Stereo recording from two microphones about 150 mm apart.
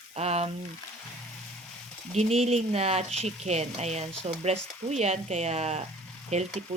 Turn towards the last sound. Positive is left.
turn(degrees=-45)  # may be behind; listen again after turning